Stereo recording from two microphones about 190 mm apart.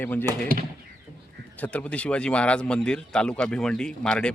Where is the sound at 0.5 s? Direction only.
50° right (ahead or behind).